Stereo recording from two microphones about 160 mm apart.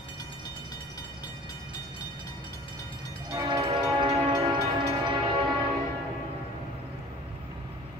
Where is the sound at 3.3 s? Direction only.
25° right (ahead or behind).